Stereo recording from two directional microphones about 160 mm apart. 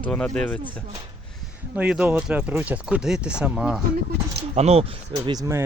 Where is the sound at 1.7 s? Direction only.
10° right (ahead or behind).